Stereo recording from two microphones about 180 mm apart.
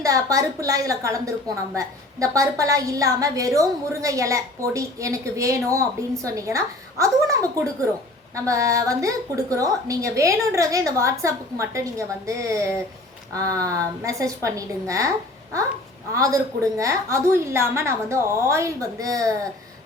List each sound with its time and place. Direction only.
0.0 s a woman's voice: 20° right (ahead or behind)
16.1 s a woman's voice: 20° right (ahead or behind)